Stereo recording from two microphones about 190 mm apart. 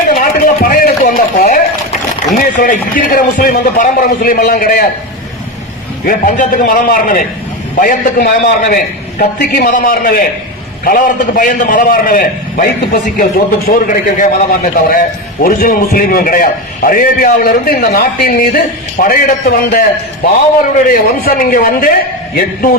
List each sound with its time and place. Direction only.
0.1 s a sound: 50° left (ahead or behind)
2.4 s a man's voice: 45° left (ahead or behind)
6.1 s a man's voice: 45° left (ahead or behind)
20.8 s a man's voice: 50° left (ahead or behind)